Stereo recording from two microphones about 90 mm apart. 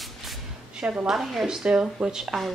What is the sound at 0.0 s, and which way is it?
Speech, centre (ahead or behind).